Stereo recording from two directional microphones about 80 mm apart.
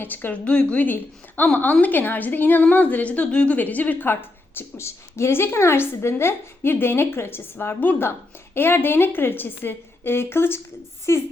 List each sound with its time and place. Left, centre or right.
0.0 s a woman's voice: left